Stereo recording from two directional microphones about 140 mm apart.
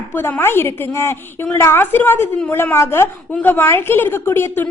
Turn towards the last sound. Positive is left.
turn(degrees=15)  # may be behind; listen again after turning